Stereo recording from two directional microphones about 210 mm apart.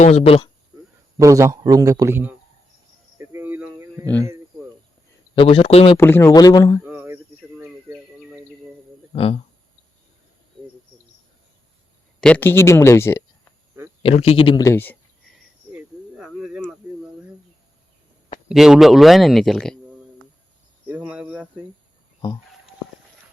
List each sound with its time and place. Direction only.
0.0 s speech: 30° left (ahead or behind)
1.2 s speech: 15° right (ahead or behind)
3.2 s a sound: 10° right (ahead or behind)
4.0 s speech: 10° left (ahead or behind)
5.3 s speech: 25° left (ahead or behind)
6.0 s speech: 10° left (ahead or behind)
6.8 s a sound: 10° right (ahead or behind)
7.6 s bird: 5° right (ahead or behind)
9.1 s speech: 25° left (ahead or behind)
12.2 s speech: 10° left (ahead or behind)
14.0 s speech: 30° left (ahead or behind); by 14.9 s 10° left (ahead or behind)
15.7 s cricket: 5° right (ahead or behind)
18.4 s speech: centre (ahead or behind)
20.8 s cricket: 5° right (ahead or behind)